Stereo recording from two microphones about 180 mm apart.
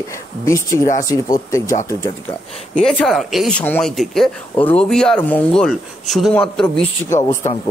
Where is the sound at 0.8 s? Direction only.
45° left (ahead or behind).